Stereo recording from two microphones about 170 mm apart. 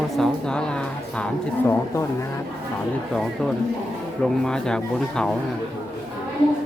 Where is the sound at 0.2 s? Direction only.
5° left (ahead or behind).